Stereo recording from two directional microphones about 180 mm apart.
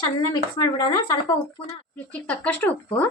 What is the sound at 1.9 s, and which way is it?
Speech, 10° left (ahead or behind).